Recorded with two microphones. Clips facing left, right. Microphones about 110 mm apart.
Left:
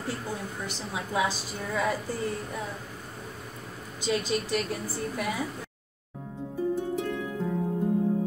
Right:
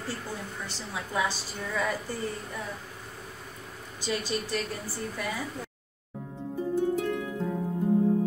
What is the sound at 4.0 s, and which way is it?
Speech, 20° left (ahead or behind).